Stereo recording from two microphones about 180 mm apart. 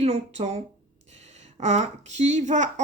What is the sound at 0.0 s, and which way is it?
Speech, 35° right (ahead or behind).